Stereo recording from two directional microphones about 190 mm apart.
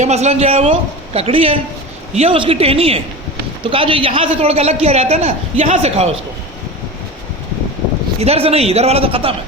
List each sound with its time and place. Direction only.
0.0 s a man's voice: 35° right (ahead or behind)
8.2 s a man's voice: 30° right (ahead or behind)